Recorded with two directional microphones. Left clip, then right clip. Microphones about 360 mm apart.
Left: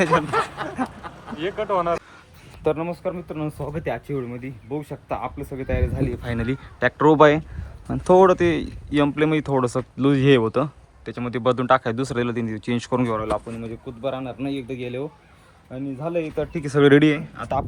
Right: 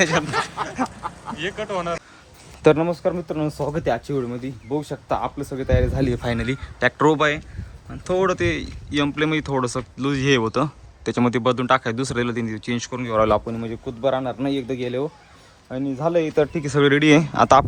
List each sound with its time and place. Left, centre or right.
0.0 s speech: centre
1.4 s speech: centre
2.6 s speech: centre
13.2 s speech: right
14.0 s speech: centre
15.7 s speech: right
16.5 s speech: centre
17.2 s speech: centre